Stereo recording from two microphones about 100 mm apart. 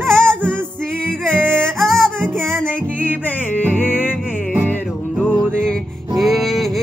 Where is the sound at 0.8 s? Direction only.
5° left (ahead or behind).